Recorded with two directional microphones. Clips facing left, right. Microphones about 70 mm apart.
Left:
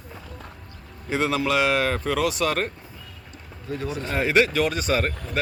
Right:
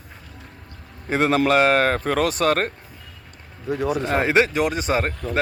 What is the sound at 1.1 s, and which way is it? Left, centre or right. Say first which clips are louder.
Speech: right 5 dB; right.